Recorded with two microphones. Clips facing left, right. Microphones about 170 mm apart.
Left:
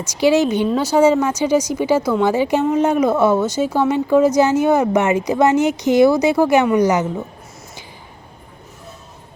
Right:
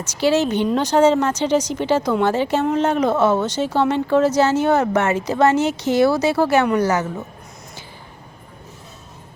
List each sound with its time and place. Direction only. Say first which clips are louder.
0.0 s speech: left 3 dB; 10° left (ahead or behind)